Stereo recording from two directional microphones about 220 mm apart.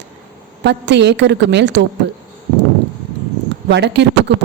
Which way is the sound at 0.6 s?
50° right (ahead or behind).